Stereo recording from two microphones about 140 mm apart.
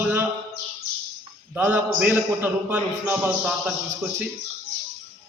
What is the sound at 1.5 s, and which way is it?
A man's voice, 10° right (ahead or behind).